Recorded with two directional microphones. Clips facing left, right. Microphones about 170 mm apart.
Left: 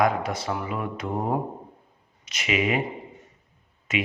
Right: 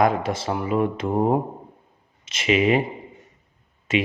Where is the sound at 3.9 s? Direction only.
30° right (ahead or behind).